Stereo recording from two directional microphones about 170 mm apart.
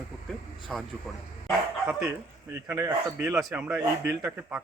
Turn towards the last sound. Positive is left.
turn(degrees=-5)  # may be behind; listen again after turning